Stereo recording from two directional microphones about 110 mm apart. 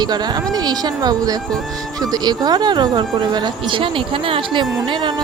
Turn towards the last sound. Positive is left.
turn(degrees=-45)  # may be behind; listen again after turning